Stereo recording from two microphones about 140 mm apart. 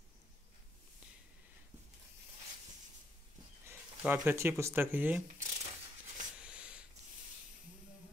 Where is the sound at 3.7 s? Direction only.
15° right (ahead or behind).